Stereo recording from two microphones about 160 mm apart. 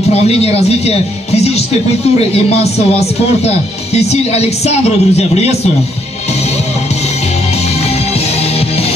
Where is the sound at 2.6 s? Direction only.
40° left (ahead or behind).